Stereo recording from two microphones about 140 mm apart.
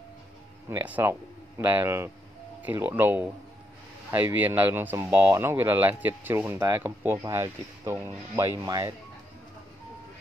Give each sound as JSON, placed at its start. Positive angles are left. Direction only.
{"t": 0.7, "sound": "speech", "side_deg": -15}